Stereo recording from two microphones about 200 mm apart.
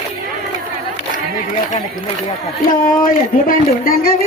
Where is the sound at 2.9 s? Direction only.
45° left (ahead or behind).